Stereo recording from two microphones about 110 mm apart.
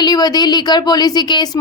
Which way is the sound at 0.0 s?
40° left (ahead or behind).